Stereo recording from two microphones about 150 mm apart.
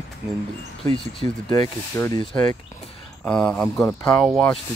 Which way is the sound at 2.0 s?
15° left (ahead or behind).